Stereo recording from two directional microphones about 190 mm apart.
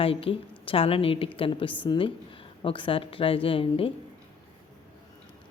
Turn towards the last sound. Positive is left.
turn(degrees=30)  # may be behind; listen again after turning